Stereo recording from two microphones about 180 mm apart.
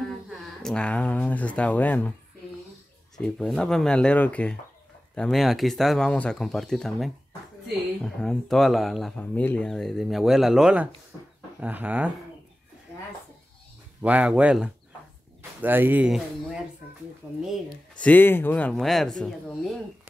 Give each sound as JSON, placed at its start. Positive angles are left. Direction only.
{"t": 0.3, "sound": "speech", "side_deg": 5}
{"t": 3.2, "sound": "speech", "side_deg": 5}
{"t": 14.0, "sound": "speech", "side_deg": -5}
{"t": 17.4, "sound": "speech", "side_deg": 0}